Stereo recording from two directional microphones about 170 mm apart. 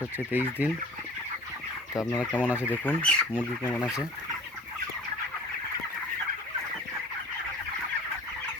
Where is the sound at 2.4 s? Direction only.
10° right (ahead or behind).